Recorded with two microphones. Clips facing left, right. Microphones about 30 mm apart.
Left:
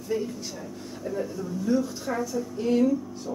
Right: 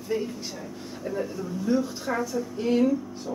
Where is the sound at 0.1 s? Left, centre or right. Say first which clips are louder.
Even; right.